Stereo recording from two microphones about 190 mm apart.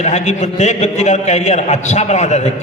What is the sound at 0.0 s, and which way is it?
A man's voice, 35° left (ahead or behind).